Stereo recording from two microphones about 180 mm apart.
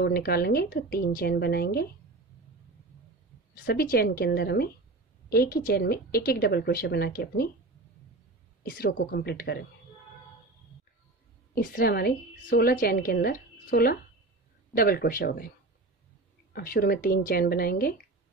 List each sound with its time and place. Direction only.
0.0 s a woman's voice: 60° left (ahead or behind)
3.6 s a woman's voice: 60° left (ahead or behind)
8.6 s a woman's voice: 60° left (ahead or behind)
11.5 s a woman's voice: 55° left (ahead or behind)
16.5 s a woman's voice: 55° left (ahead or behind)